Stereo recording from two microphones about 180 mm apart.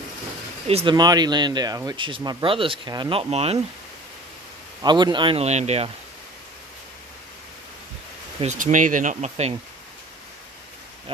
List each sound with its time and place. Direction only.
0.7 s speech: 30° right (ahead or behind)
4.8 s speech: 25° right (ahead or behind)
8.4 s speech: 40° right (ahead or behind)